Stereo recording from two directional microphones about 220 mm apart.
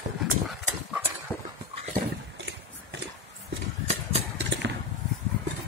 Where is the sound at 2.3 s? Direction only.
50° right (ahead or behind).